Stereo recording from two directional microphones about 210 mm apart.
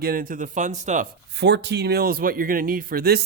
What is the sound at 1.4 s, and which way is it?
Speech, 55° right (ahead or behind).